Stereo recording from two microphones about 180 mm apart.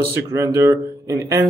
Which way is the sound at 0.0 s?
15° right (ahead or behind).